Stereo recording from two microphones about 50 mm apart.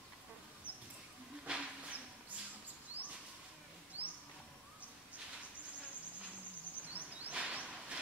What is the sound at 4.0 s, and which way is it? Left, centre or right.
Music, right.